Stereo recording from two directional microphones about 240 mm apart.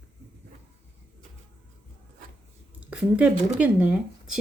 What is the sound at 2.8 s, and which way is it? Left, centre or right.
Speech, centre.